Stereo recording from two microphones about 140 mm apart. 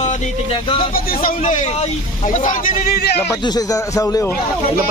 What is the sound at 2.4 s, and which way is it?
Speech, 70° left (ahead or behind).